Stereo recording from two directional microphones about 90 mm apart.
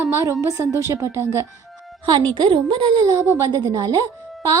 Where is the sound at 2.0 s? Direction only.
60° right (ahead or behind).